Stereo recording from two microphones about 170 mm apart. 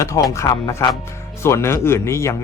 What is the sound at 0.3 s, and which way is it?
Speech, 20° left (ahead or behind).